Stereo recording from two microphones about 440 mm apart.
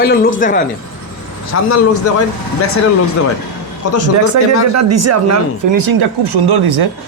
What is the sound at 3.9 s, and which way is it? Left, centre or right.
Speech, left.